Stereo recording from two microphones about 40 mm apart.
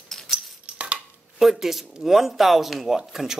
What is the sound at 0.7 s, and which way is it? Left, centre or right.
Cutlery, right.